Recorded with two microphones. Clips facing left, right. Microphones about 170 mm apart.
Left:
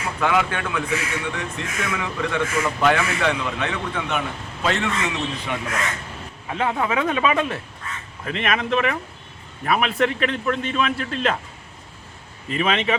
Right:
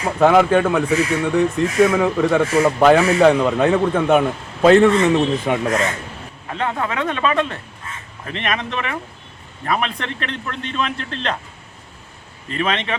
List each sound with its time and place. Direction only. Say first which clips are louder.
0.0 s a man's voice: right 8 dB; 40° right (ahead or behind)
6.5 s a man's voice: even; 5° left (ahead or behind)
12.5 s speech: left 1 dB; 5° left (ahead or behind)